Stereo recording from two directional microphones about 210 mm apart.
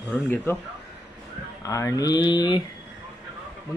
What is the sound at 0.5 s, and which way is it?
Speech, 10° left (ahead or behind).